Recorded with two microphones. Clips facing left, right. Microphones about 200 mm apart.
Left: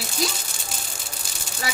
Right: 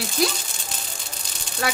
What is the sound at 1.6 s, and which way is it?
Speech, 60° right (ahead or behind).